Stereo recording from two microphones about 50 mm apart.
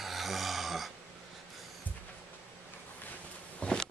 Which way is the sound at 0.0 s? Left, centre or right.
Centre.